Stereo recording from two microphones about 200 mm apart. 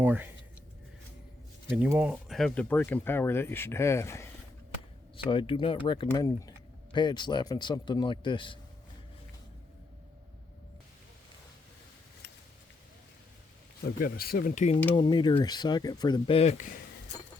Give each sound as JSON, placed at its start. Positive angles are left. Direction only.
{"t": 0.0, "sound": "speech", "side_deg": -10}
{"t": 1.7, "sound": "speech", "side_deg": -5}
{"t": 5.1, "sound": "speech", "side_deg": 25}
{"t": 13.8, "sound": "speech", "side_deg": 50}
{"t": 14.9, "sound": "speech", "side_deg": 25}